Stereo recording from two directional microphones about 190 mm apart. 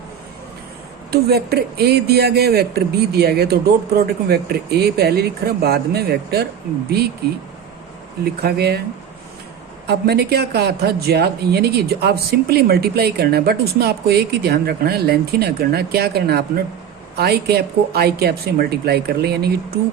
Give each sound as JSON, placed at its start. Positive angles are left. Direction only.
{"t": 1.1, "sound": "speech", "side_deg": -55}
{"t": 8.2, "sound": "speech", "side_deg": -55}
{"t": 9.8, "sound": "speech", "side_deg": -60}